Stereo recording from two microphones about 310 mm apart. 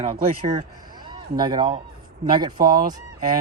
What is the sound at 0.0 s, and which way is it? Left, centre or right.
Speech, centre.